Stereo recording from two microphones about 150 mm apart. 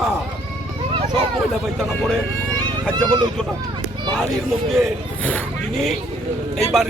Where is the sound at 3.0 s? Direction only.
30° right (ahead or behind).